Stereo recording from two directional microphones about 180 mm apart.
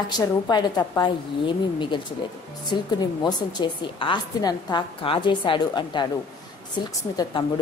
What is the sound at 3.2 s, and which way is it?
A woman's voice, 25° left (ahead or behind).